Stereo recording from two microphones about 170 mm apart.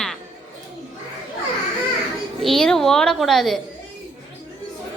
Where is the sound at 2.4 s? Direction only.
Centre (ahead or behind).